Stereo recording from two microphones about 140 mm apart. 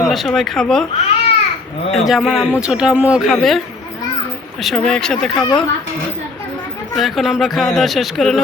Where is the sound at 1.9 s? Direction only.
Centre (ahead or behind).